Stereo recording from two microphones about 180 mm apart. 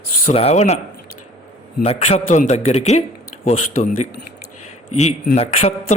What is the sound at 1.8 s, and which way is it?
Speech, 40° left (ahead or behind).